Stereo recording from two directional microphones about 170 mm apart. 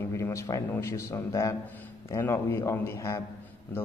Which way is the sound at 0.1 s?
15° left (ahead or behind).